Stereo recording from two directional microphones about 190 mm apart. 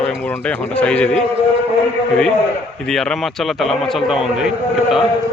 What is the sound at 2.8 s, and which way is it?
A man's voice, centre (ahead or behind).